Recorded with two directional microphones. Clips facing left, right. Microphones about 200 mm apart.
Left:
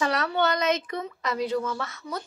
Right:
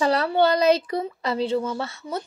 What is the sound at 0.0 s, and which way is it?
Speech, 30° right (ahead or behind).